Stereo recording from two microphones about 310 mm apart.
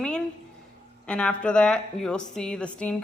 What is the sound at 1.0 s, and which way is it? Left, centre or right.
A woman's voice, centre.